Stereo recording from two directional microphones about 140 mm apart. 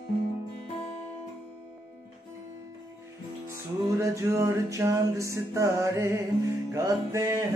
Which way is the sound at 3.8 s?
20° right (ahead or behind).